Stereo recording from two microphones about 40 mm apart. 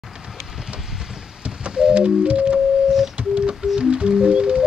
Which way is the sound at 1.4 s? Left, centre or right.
Right.